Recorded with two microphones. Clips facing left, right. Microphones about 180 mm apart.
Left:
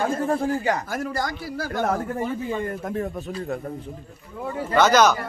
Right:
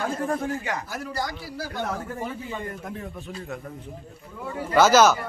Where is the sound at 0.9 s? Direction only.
50° left (ahead or behind).